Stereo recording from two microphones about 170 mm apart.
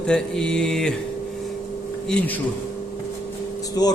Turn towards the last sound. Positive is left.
turn(degrees=20)  # may be behind; listen again after turning